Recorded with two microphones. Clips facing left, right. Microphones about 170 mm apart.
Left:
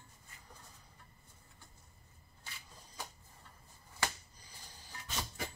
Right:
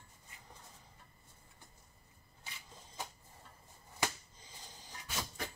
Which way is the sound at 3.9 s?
20° right (ahead or behind).